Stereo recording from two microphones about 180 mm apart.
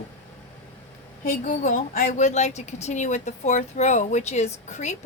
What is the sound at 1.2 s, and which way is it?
A woman's voice, 45° left (ahead or behind).